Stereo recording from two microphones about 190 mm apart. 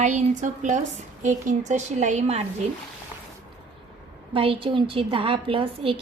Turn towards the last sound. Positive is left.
turn(degrees=-30)  # may be behind; listen again after turning